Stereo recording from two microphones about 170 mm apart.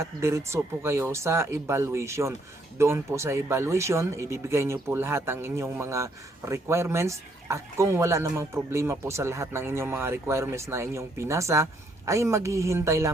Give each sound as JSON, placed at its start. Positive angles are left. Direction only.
{"t": 0.0, "sound": "speech", "side_deg": -15}